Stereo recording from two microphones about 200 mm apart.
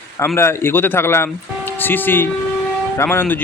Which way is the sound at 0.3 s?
15° left (ahead or behind).